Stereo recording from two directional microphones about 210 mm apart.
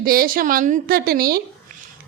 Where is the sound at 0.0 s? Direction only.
45° right (ahead or behind).